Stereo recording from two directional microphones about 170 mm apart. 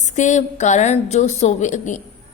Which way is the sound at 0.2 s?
45° left (ahead or behind).